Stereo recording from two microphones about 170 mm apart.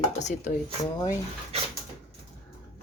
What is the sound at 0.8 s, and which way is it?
Speech, 20° left (ahead or behind).